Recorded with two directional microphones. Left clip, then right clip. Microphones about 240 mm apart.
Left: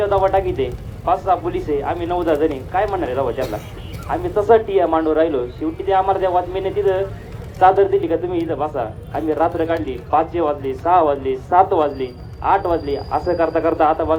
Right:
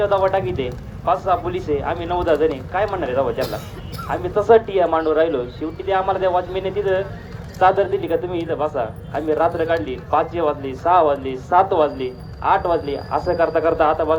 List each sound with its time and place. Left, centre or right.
0.0 s speech: right